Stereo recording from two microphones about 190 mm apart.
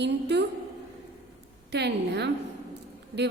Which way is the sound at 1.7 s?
60° right (ahead or behind).